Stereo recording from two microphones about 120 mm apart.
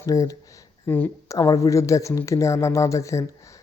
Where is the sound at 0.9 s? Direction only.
15° left (ahead or behind).